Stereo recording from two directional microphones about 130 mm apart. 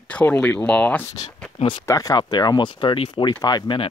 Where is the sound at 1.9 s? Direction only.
25° left (ahead or behind).